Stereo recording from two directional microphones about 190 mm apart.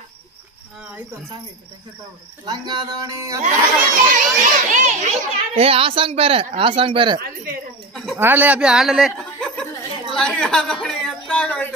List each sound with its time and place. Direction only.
2.4 s a child's voice: 20° right (ahead or behind)
3.4 s a child's voice: 45° right (ahead or behind); by 7.2 s 25° right (ahead or behind)
7.9 s a sound: centre (ahead or behind)
8.2 s chuckle: 10° right (ahead or behind)